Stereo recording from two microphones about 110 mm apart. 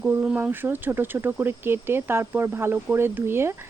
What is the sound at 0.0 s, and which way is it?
Speech, 20° right (ahead or behind).